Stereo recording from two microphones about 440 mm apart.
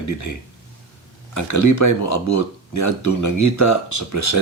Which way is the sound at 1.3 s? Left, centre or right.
Left.